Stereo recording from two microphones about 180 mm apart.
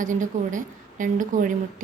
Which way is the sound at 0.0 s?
45° right (ahead or behind).